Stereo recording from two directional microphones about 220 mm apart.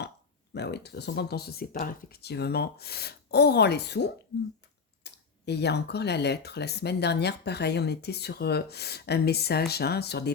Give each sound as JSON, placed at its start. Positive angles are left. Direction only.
{"t": 0.5, "sound": "speech", "side_deg": 50}